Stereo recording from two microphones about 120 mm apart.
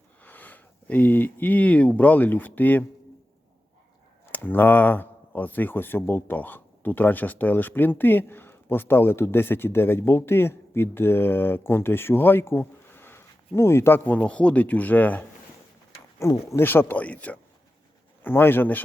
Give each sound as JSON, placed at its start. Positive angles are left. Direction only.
{"t": 0.2, "sound": "speech", "side_deg": 15}
{"t": 4.3, "sound": "speech", "side_deg": 15}
{"t": 16.1, "sound": "speech", "side_deg": 25}